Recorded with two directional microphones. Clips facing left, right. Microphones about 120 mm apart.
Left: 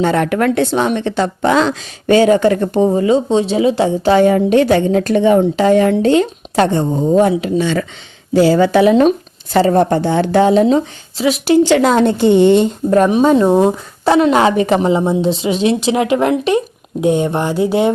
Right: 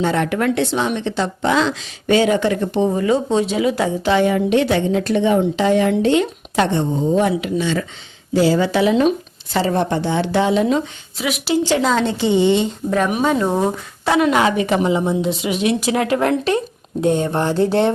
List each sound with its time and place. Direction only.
0.0 s a woman's voice: 55° left (ahead or behind)
2.9 s a woman's voice: 25° left (ahead or behind)
4.1 s a woman's voice: 40° left (ahead or behind)
8.4 s a woman's voice: 60° left (ahead or behind); by 11.3 s 30° left (ahead or behind)
11.4 s a woman's voice: 65° left (ahead or behind); by 13.1 s 50° left (ahead or behind)
13.1 s a woman's voice: 25° left (ahead or behind)